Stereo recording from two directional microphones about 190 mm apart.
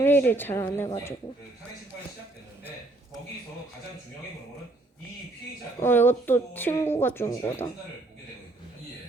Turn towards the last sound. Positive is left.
turn(degrees=15)  # may be behind; listen again after turning